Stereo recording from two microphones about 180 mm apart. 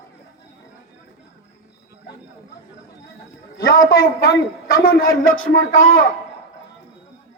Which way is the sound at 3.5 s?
55° left (ahead or behind).